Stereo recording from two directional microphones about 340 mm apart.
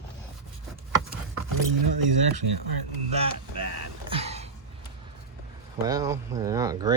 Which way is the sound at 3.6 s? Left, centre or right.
Right.